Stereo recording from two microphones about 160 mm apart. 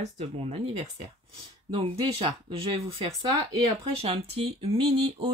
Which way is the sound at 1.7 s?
30° right (ahead or behind).